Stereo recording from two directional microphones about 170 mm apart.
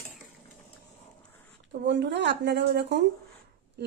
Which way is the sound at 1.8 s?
90° right.